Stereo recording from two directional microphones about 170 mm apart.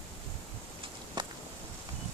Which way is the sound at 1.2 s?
25° right (ahead or behind).